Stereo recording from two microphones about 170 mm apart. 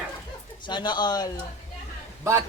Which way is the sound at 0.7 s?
25° left (ahead or behind).